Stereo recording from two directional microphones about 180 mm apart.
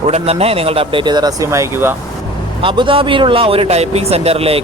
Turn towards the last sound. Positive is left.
turn(degrees=-35)  # may be behind; listen again after turning